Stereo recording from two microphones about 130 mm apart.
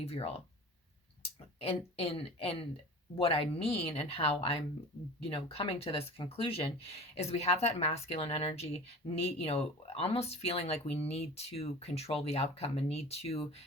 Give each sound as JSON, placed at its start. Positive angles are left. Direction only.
{"t": 0.0, "sound": "a woman's voice", "side_deg": 50}